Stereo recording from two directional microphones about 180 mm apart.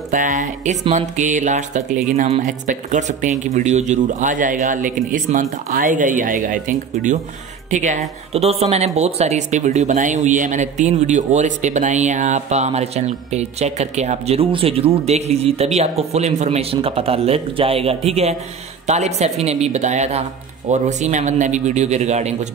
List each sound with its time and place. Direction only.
0.1 s speech: 45° right (ahead or behind)